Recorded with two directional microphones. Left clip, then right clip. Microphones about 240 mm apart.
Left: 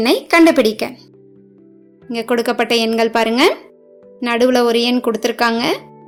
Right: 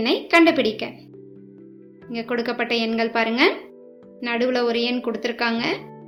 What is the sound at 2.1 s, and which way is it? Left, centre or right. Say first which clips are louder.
A woman's voice: left 8 dB; left.